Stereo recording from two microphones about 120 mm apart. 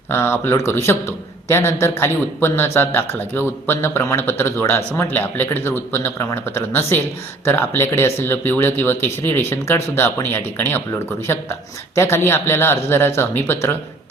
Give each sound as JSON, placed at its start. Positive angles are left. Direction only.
{"t": 0.1, "sound": "a man's voice", "side_deg": 20}